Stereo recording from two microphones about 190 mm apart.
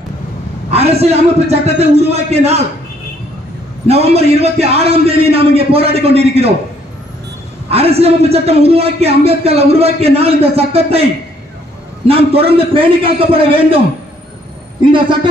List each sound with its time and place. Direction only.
0.7 s a man's voice: 35° right (ahead or behind)
3.8 s a man's voice: 35° right (ahead or behind)
7.7 s a man's voice: 30° right (ahead or behind)
12.1 s a man's voice: 30° right (ahead or behind)
14.9 s a man's voice: 25° right (ahead or behind)